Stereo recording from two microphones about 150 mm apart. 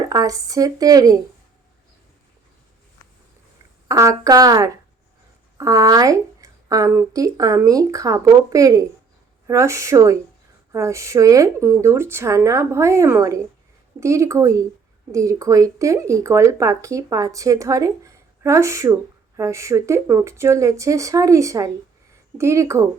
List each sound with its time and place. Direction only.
0.1 s speech: 25° right (ahead or behind)
3.8 s speech: 20° right (ahead or behind)